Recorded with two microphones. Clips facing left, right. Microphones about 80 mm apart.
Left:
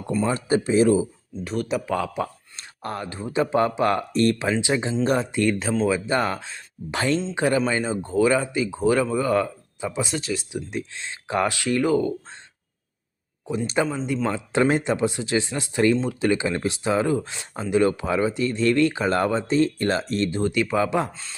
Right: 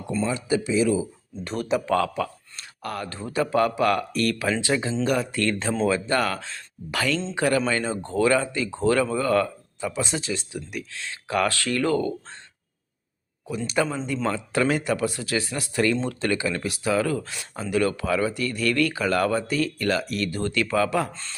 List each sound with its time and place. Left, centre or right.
0.3 s speech: left
1.5 s speech: centre
2.2 s speech: left
5.5 s speech: centre
5.9 s speech: left
10.0 s speech: centre
10.5 s speech: left
13.5 s speech: left
16.0 s speech: centre
16.3 s speech: left
21.1 s speech: centre